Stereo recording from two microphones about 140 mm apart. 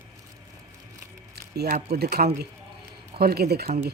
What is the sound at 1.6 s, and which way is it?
Speech, 90° right.